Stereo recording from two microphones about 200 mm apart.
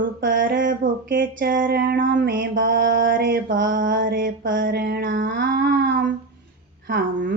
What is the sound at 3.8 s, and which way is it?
Speech, 65° right (ahead or behind).